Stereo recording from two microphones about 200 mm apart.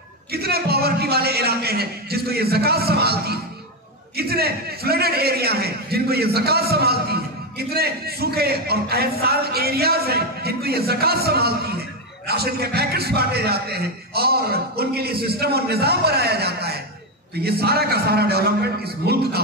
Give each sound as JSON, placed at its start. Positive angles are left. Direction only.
{"t": 0.3, "sound": "a man's voice", "side_deg": -50}